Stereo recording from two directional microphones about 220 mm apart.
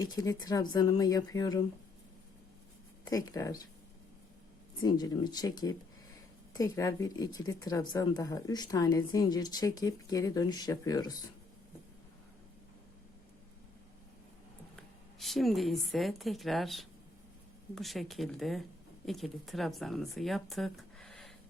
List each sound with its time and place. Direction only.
0.0 s speech: 15° left (ahead or behind)
3.0 s speech: 15° left (ahead or behind)
4.8 s speech: 20° left (ahead or behind)
14.8 s speech: centre (ahead or behind)